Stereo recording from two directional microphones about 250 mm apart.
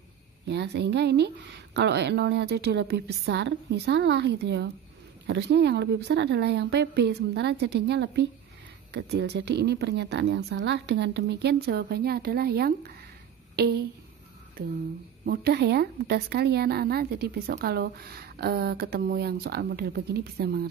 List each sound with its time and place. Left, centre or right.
0.5 s speech: right
13.6 s a sound: right
15.2 s speech: right